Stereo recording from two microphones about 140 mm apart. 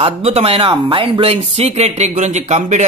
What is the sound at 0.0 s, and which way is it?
Speech, 50° right (ahead or behind).